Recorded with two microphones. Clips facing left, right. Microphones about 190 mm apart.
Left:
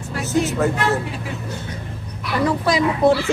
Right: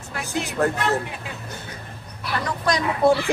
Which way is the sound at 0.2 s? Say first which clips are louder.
Left 8 dB; 15° right (ahead or behind).